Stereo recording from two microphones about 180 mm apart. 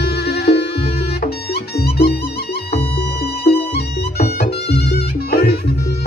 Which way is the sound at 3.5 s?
60° left (ahead or behind).